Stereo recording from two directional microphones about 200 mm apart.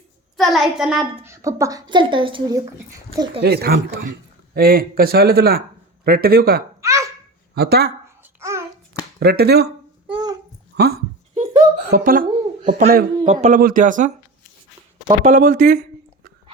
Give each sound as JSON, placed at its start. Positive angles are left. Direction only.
{"t": 0.3, "sound": "a child's voice", "side_deg": 0}
{"t": 1.3, "sound": "a woman's voice", "side_deg": -15}
{"t": 3.4, "sound": "a man's voice", "side_deg": -55}
{"t": 6.8, "sound": "laughter", "side_deg": -15}
{"t": 7.5, "sound": "a man's voice", "side_deg": -55}
{"t": 8.2, "sound": "babbling", "side_deg": -15}
{"t": 9.2, "sound": "a man's voice", "side_deg": -55}
{"t": 10.1, "sound": "babbling", "side_deg": -20}
{"t": 11.3, "sound": "a sound", "side_deg": -35}
{"t": 11.9, "sound": "speech", "side_deg": -45}
{"t": 15.2, "sound": "a man's voice", "side_deg": -45}